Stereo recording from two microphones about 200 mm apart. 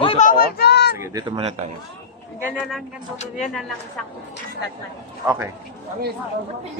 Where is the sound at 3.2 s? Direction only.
35° left (ahead or behind).